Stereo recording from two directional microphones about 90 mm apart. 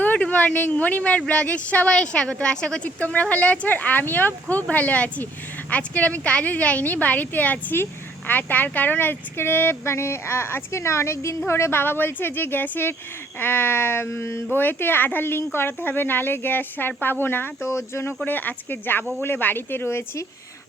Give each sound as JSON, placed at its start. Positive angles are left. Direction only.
{"t": 0.0, "sound": "a woman's voice", "side_deg": 15}